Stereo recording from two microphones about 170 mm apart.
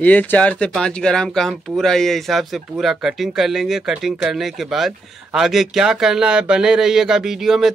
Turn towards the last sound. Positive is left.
turn(degrees=0)  # may be behind; listen again after turning